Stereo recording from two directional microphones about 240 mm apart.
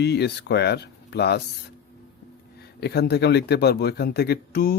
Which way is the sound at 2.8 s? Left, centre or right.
Left.